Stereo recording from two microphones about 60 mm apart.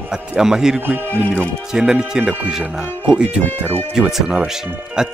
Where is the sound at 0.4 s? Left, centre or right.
Centre.